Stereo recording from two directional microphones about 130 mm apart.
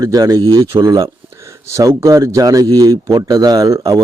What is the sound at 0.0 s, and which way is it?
A man's voice, 25° right (ahead or behind).